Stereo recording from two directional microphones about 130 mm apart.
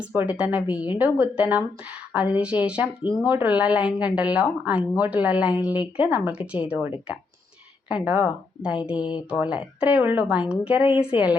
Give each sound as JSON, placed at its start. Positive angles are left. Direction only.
{"t": 0.0, "sound": "speech", "side_deg": -10}
{"t": 9.0, "sound": "speech", "side_deg": 35}
{"t": 9.4, "sound": "speech", "side_deg": -10}